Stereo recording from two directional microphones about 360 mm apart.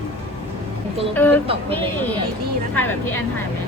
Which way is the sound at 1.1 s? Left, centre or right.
Centre.